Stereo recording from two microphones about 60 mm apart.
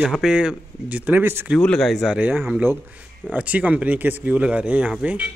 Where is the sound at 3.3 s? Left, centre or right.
Right.